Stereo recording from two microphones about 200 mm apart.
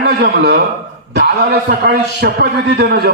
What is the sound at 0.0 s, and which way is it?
A man's voice, 55° right (ahead or behind).